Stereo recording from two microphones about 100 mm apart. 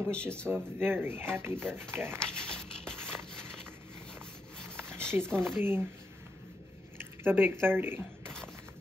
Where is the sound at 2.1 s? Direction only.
5° left (ahead or behind).